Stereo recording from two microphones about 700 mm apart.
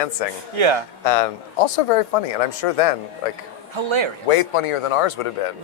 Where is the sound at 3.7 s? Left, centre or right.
Right.